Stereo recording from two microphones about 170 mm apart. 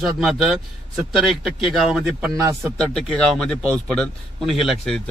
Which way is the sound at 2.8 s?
5° left (ahead or behind).